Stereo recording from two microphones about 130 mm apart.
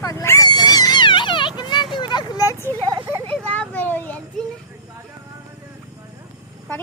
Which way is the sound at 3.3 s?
10° left (ahead or behind).